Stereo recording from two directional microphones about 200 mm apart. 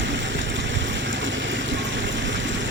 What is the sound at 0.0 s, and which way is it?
Vehicle, 65° right (ahead or behind).